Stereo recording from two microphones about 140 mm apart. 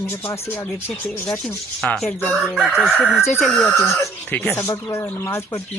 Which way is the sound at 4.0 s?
15° left (ahead or behind).